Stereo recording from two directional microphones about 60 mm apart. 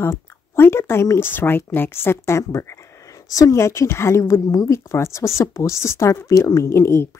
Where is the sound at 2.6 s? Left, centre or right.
Left.